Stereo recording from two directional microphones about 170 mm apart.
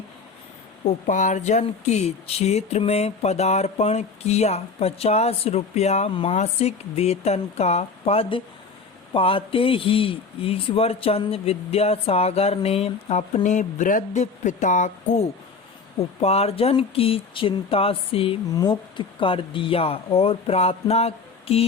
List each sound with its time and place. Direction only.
0.9 s speech: 45° left (ahead or behind)